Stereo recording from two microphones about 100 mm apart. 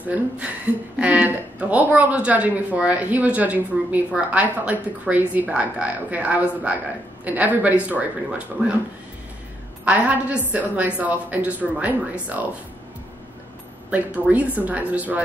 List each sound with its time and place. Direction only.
0.0 s speech: 15° right (ahead or behind)
9.8 s speech: 15° right (ahead or behind)
13.8 s speech: 15° right (ahead or behind)